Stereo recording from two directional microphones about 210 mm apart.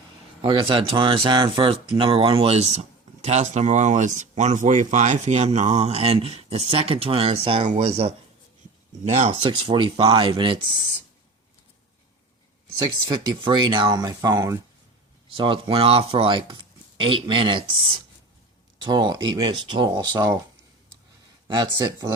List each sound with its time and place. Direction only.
0.4 s speech: 25° right (ahead or behind)
13.1 s speech: 20° right (ahead or behind)
18.8 s speech: 20° right (ahead or behind)
21.4 s speech: 20° right (ahead or behind)